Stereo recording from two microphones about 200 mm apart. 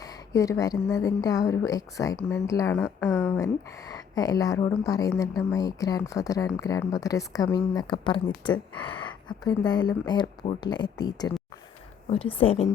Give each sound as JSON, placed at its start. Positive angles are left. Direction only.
{"t": 0.0, "sound": "speech", "side_deg": 15}